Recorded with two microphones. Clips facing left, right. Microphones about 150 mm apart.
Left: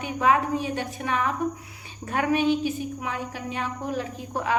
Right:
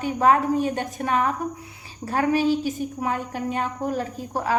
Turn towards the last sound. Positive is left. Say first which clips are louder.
# right 2 dB
turn(degrees=-40)  # may be behind; listen again after turning